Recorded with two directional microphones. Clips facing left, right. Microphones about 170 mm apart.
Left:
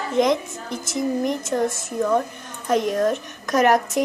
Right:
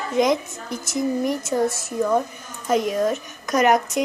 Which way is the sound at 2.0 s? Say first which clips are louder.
Even; 5° right (ahead or behind).